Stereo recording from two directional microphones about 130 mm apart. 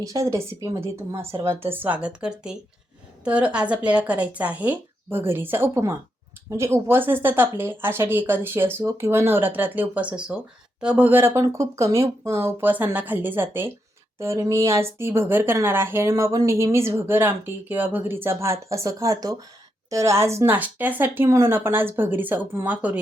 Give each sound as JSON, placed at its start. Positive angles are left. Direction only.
{"t": 0.0, "sound": "a woman's voice", "side_deg": -25}